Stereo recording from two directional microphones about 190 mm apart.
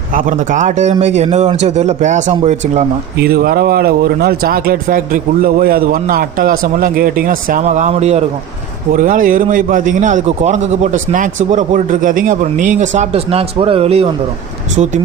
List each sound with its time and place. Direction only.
0.1 s speech: 45° right (ahead or behind)
3.2 s a man's voice: 55° right (ahead or behind); by 8.2 s 35° right (ahead or behind)
8.9 s a man's voice: 45° right (ahead or behind)